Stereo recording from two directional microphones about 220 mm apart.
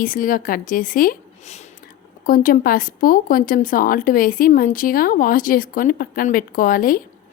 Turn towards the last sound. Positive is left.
turn(degrees=40)  # may be behind; listen again after turning